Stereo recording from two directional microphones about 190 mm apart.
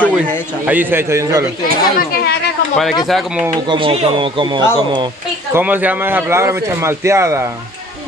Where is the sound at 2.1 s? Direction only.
55° left (ahead or behind).